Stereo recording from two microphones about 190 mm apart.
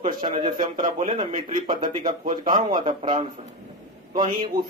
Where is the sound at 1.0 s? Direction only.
30° right (ahead or behind).